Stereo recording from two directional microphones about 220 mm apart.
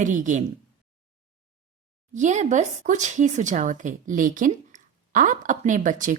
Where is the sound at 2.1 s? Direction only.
35° right (ahead or behind).